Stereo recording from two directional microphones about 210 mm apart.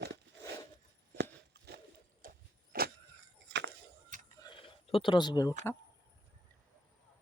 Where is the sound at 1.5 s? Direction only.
45° right (ahead or behind).